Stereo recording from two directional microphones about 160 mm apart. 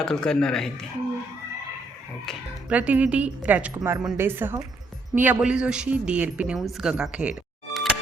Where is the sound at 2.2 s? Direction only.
10° right (ahead or behind).